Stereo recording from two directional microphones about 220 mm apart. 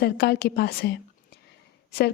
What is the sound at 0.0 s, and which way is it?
A woman's voice, 45° left (ahead or behind).